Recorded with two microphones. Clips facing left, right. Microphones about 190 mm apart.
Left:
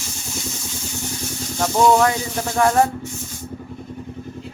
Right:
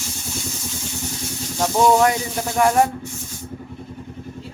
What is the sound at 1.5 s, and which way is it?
Speech, 15° right (ahead or behind).